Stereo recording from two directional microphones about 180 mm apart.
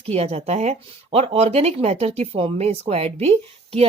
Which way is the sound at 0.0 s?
35° right (ahead or behind).